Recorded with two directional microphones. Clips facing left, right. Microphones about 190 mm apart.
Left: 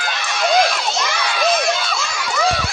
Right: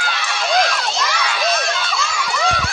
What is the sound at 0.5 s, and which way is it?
Crowd, 5° left (ahead or behind).